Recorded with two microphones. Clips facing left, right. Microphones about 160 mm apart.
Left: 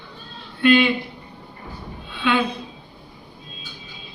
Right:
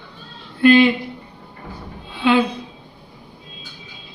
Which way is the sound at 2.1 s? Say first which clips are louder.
Right 5 dB; 35° right (ahead or behind).